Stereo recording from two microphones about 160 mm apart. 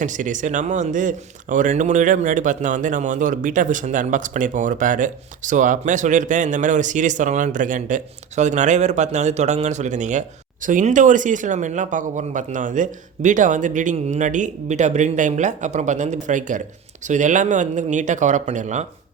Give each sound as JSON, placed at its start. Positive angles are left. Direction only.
{"t": 0.0, "sound": "speech", "side_deg": -50}